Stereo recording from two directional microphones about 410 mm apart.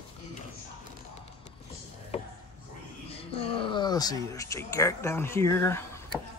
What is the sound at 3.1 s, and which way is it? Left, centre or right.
Speech, centre.